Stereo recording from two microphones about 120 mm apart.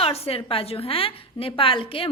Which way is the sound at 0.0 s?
55° left (ahead or behind).